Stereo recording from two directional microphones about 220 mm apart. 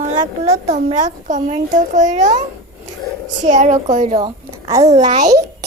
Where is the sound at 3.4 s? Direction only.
35° right (ahead or behind).